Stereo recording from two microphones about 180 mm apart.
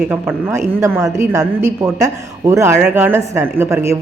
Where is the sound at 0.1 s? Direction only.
10° right (ahead or behind).